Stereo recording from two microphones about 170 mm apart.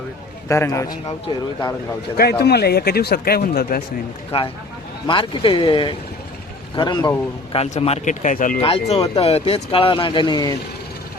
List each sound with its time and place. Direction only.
0.4 s a man's voice: 15° left (ahead or behind)
2.4 s speech: 70° left (ahead or behind)
5.0 s speech: 30° left (ahead or behind)
7.5 s speech: 35° left (ahead or behind)
8.6 s speech: 35° left (ahead or behind)